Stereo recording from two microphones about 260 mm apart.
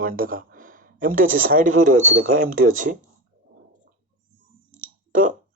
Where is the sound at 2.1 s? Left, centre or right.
Right.